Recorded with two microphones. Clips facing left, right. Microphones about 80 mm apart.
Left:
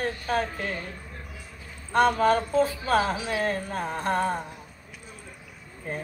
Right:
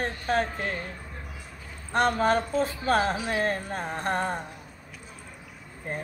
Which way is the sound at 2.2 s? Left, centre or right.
Right.